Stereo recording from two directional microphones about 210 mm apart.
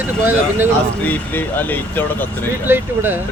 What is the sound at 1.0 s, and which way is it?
Speech, 10° left (ahead or behind).